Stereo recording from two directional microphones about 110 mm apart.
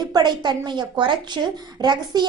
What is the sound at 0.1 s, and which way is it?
A woman's voice, 40° right (ahead or behind).